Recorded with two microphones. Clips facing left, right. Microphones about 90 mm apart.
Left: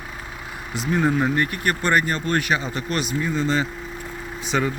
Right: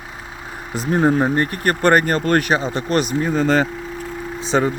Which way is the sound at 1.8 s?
45° right (ahead or behind).